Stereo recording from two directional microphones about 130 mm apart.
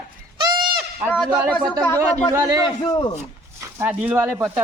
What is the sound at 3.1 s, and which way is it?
Speech, 20° right (ahead or behind).